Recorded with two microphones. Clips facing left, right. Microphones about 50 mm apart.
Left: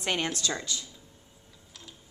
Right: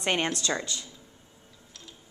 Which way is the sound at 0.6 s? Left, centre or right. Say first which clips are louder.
Right 2 dB; centre.